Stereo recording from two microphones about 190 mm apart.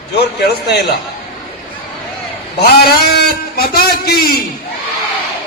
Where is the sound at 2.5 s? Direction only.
55° left (ahead or behind).